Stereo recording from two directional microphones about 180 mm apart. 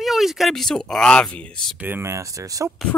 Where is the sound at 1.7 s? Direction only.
10° right (ahead or behind).